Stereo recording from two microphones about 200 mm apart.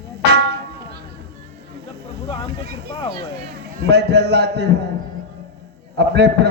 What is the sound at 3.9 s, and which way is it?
Speech, 55° right (ahead or behind).